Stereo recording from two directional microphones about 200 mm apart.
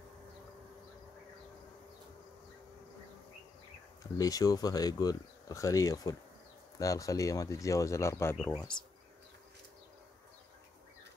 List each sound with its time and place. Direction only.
4.2 s speech: 20° left (ahead or behind)